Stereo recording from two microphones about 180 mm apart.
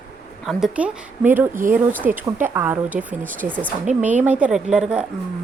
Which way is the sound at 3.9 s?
40° right (ahead or behind).